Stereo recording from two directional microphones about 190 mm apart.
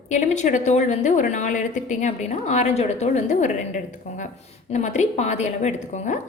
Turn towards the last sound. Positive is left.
turn(degrees=40)  # may be behind; listen again after turning